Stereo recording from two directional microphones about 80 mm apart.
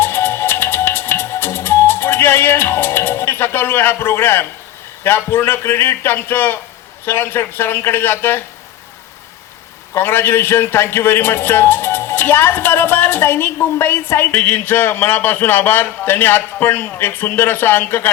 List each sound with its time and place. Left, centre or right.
0.0 s music: left
5.0 s a man's voice: left
9.9 s a man's voice: left